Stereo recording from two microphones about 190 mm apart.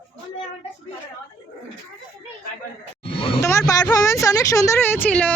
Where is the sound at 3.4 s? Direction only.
15° left (ahead or behind).